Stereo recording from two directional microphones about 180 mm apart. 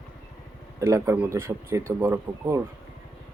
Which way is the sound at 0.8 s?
15° right (ahead or behind).